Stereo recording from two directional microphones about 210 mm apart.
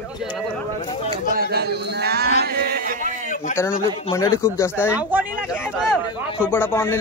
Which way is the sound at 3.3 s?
40° left (ahead or behind).